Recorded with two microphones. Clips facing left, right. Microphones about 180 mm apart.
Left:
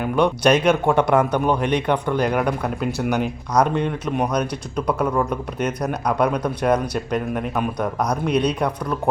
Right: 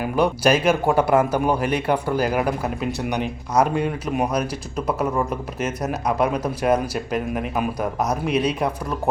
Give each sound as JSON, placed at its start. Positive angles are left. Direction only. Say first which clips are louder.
{"t": 0.0, "sound": "speech", "louder": "left 1 dB", "side_deg": -5}